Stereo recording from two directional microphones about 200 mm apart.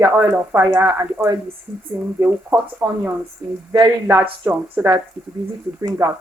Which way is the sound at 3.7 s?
20° right (ahead or behind).